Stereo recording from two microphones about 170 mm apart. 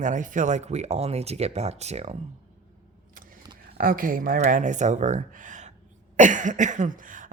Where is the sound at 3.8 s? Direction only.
55° right (ahead or behind).